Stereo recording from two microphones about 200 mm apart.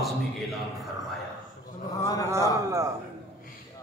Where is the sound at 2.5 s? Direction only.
15° right (ahead or behind).